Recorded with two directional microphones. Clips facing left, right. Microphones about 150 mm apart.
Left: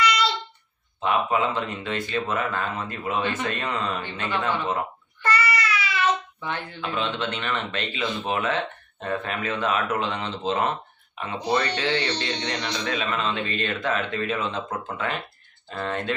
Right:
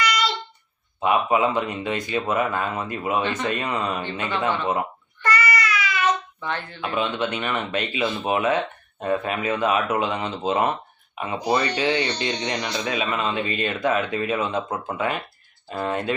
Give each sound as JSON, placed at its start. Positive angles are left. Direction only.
{"t": 0.0, "sound": "a sound", "side_deg": 25}
{"t": 1.0, "sound": "speech", "side_deg": -10}
{"t": 5.2, "sound": "child singing", "side_deg": 30}
{"t": 6.4, "sound": "speech", "side_deg": 15}
{"t": 6.8, "sound": "speech", "side_deg": -10}